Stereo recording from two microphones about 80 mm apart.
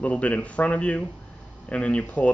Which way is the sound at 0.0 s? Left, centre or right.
Centre.